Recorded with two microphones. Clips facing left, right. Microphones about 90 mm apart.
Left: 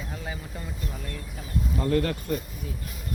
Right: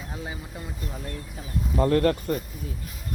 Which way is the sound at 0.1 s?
20° right (ahead or behind).